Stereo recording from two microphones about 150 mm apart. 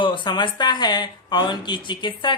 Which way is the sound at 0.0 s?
35° left (ahead or behind).